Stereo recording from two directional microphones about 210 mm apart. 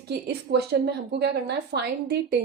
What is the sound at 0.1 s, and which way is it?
Speech, 50° right (ahead or behind).